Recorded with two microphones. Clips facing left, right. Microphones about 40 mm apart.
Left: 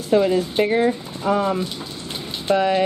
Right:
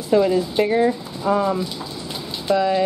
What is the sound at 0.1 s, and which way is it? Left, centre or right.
Speech, left.